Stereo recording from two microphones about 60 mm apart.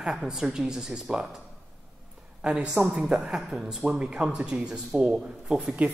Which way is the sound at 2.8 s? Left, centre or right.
Centre.